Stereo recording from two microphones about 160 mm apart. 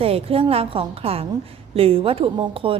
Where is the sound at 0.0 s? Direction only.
35° right (ahead or behind).